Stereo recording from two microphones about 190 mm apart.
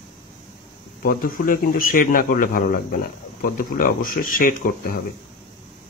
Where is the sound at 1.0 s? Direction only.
50° left (ahead or behind).